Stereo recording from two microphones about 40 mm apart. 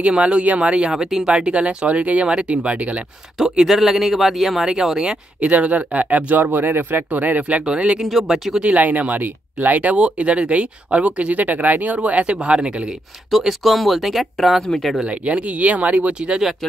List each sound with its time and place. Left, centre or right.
0.0 s speech: right
0.9 s speech: centre
1.3 s speech: right
3.4 s speech: centre
5.4 s speech: right
7.6 s speech: right
8.0 s speech: centre
8.6 s speech: right
9.9 s speech: right
13.4 s speech: centre
15.0 s speech: right